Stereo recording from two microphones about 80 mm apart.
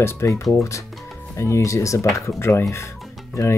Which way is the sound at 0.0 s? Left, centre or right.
Left.